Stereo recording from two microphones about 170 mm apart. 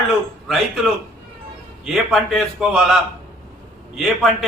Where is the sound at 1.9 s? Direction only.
Centre (ahead or behind).